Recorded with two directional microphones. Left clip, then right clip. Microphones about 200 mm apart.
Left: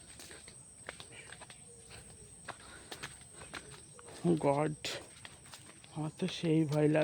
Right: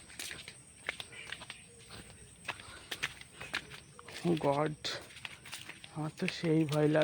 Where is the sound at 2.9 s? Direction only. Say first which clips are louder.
Right 9 dB; 45° right (ahead or behind).